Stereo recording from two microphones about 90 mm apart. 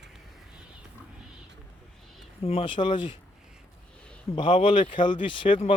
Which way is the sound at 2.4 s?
90° left.